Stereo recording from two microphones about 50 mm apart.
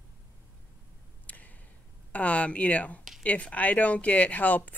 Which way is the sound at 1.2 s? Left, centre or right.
Left.